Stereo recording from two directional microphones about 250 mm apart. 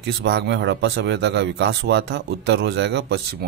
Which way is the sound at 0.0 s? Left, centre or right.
Right.